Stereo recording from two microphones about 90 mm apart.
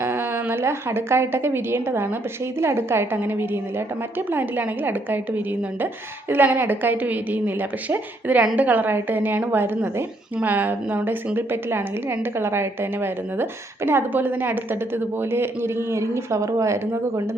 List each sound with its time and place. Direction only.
0.0 s a woman's voice: 25° right (ahead or behind)